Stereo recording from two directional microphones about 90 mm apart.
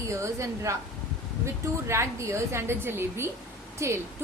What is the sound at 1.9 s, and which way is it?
A woman's voice, 30° right (ahead or behind).